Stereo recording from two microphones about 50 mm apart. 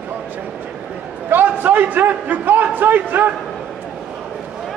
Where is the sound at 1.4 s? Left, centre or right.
Right.